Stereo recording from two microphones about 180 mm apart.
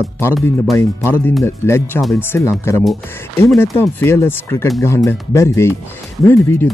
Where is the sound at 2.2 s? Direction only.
15° left (ahead or behind).